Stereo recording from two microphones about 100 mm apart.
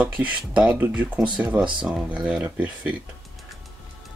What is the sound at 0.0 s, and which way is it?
Speech, 15° right (ahead or behind).